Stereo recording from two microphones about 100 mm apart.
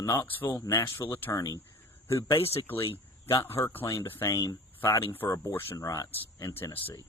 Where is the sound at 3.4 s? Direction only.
25° left (ahead or behind).